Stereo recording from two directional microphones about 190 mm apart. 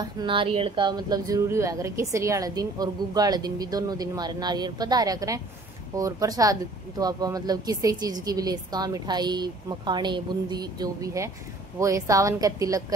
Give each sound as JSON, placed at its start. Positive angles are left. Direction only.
{"t": 0.0, "sound": "a woman's voice", "side_deg": -25}